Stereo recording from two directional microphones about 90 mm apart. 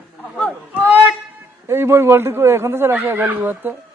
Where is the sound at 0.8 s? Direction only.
20° right (ahead or behind).